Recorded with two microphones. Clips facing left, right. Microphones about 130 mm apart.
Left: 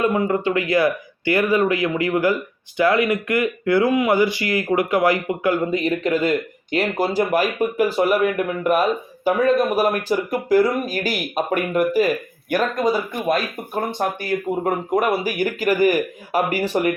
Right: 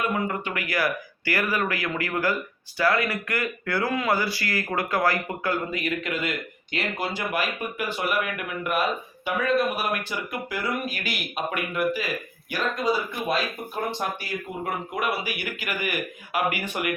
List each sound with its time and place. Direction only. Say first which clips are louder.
0.0 s speech: left 8 dB; 25° left (ahead or behind)